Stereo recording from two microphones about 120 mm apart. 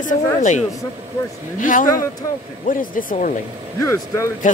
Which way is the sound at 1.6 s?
90° left.